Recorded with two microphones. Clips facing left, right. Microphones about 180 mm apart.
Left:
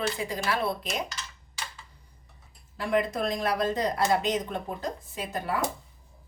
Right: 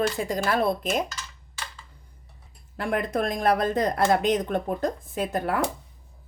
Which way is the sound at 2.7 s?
55° right (ahead or behind).